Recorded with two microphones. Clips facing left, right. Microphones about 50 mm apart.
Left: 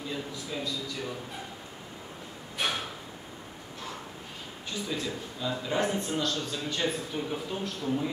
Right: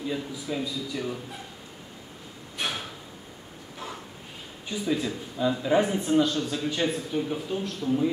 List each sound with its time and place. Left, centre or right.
0.1 s a man's voice: centre
2.5 s a sound: centre
4.6 s a man's voice: centre